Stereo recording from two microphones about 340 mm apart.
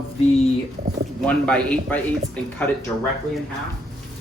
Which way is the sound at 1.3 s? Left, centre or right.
Centre.